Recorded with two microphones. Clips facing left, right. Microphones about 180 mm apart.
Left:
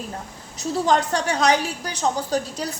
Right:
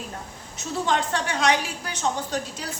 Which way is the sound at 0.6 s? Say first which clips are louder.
Left 5 dB; 40° left (ahead or behind).